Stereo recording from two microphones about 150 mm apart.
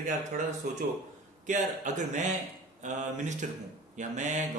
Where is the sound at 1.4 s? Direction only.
55° right (ahead or behind).